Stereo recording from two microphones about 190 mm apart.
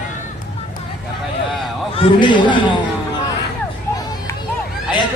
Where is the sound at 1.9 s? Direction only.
25° left (ahead or behind).